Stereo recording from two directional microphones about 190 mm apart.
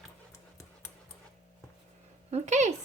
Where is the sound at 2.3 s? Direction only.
35° right (ahead or behind).